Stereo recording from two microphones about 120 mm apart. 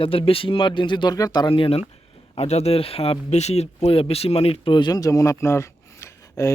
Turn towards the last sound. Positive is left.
turn(degrees=25)  # may be behind; listen again after turning